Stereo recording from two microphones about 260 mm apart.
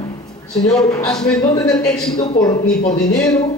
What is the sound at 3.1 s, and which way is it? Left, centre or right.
Speech, centre.